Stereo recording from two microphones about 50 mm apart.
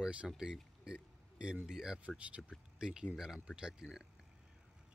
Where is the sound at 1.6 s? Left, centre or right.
Centre.